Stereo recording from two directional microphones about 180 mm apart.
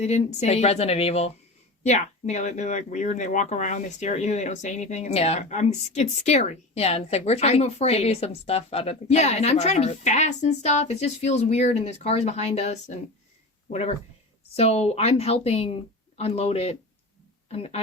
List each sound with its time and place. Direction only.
0.3 s speech: 35° left (ahead or behind)
14.5 s speech: 35° left (ahead or behind)